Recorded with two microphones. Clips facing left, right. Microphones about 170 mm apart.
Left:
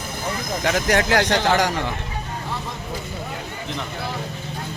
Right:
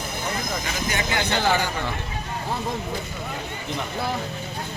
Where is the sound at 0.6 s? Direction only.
75° left (ahead or behind).